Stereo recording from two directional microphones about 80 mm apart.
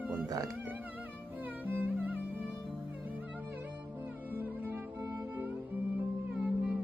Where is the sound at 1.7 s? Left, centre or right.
Right.